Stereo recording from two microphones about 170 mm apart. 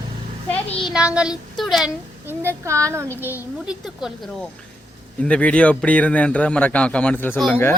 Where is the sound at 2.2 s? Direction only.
15° right (ahead or behind); by 7.4 s 10° left (ahead or behind).